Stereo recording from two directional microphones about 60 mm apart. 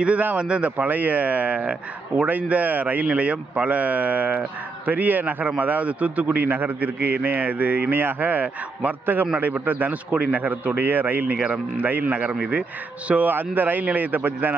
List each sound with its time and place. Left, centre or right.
0.0 s a man's voice: right
11.3 s a man's voice: centre